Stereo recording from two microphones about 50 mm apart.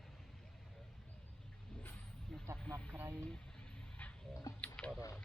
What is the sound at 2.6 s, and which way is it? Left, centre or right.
Speech, centre.